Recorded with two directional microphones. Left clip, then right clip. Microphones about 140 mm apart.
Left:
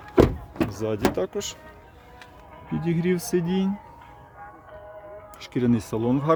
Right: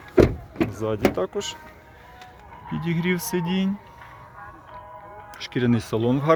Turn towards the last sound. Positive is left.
turn(degrees=0)  # may be behind; listen again after turning